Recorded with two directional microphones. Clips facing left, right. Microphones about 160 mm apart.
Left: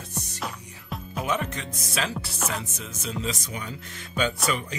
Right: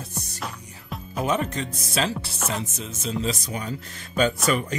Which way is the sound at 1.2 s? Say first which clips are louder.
Right 4 dB; 35° right (ahead or behind).